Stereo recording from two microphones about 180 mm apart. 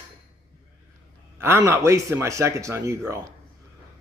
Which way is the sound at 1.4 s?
15° right (ahead or behind).